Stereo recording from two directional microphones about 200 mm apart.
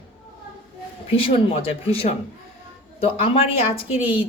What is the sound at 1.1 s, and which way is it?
A woman's voice, 30° left (ahead or behind).